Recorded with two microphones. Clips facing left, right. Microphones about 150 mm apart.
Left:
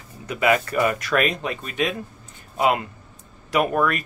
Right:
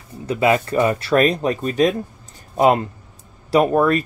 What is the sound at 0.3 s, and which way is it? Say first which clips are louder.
Speech: right 3 dB; 30° right (ahead or behind).